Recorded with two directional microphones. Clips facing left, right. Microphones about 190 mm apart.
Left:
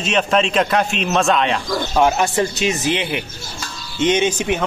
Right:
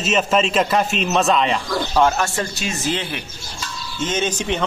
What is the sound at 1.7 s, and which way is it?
A man's voice, 15° left (ahead or behind).